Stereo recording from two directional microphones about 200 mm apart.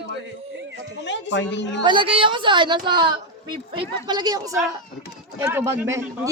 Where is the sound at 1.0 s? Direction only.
65° left (ahead or behind).